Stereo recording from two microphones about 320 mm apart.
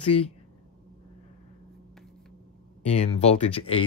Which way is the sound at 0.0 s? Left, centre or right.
Centre.